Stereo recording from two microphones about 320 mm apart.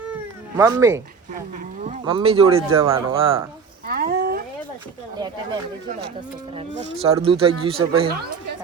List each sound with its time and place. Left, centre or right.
0.1 s cat: centre
1.8 s speech: centre
3.8 s a sound: right
5.1 s speech: centre
7.1 s speech: centre